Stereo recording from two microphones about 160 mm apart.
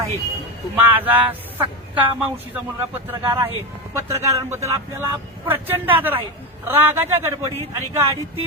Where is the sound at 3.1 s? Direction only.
15° right (ahead or behind).